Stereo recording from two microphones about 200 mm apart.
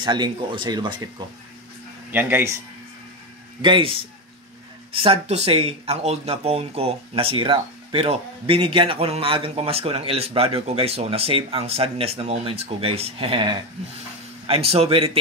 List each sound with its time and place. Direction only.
0.0 s speech: 20° right (ahead or behind)
2.1 s speech: 10° right (ahead or behind)
3.6 s speech: 25° right (ahead or behind)